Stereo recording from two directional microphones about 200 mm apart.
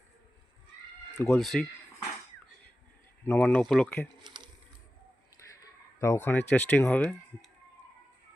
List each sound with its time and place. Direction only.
1.2 s speech: 5° left (ahead or behind)
3.2 s speech: 10° left (ahead or behind)
5.4 s a sound: 10° left (ahead or behind)
6.0 s speech: 15° left (ahead or behind)